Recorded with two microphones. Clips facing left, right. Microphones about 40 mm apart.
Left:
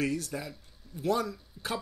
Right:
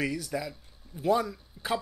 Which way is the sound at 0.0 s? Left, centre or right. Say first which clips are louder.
Right 1 dB; centre.